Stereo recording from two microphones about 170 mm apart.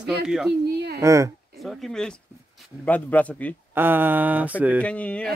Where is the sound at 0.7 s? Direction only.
70° right (ahead or behind).